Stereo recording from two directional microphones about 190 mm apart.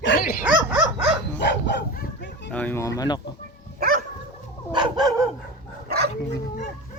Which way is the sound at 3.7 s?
50° right (ahead or behind).